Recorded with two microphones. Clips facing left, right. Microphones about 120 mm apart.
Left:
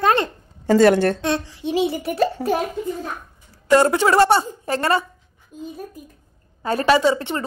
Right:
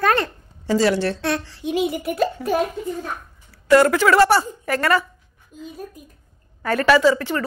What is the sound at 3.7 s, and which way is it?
A woman's voice, 25° left (ahead or behind).